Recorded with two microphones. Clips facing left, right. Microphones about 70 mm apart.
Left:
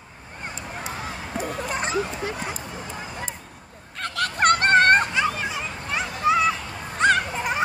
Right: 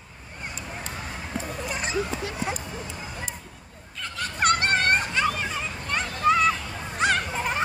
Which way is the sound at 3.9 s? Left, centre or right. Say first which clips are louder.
Left 6 dB; left.